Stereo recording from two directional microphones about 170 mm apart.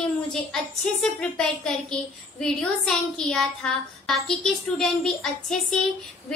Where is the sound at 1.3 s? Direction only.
5° left (ahead or behind).